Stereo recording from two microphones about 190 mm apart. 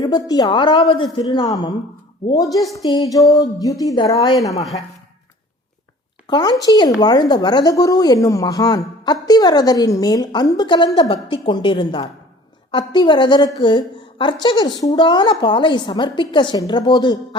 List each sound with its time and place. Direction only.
0.0 s a woman's voice: 20° left (ahead or behind)
6.2 s a woman's voice: 25° left (ahead or behind)